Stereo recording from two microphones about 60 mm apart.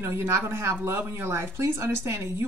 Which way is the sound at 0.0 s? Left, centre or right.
Right.